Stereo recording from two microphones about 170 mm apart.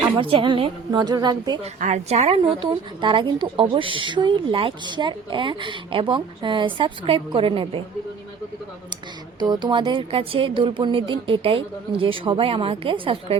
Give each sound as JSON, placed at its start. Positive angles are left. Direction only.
{"t": 0.2, "sound": "a woman's voice", "side_deg": -30}
{"t": 1.6, "sound": "a woman's voice", "side_deg": -40}
{"t": 9.4, "sound": "speech", "side_deg": -25}